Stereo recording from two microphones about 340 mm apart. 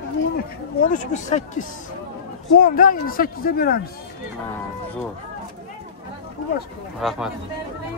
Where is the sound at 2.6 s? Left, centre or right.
Left.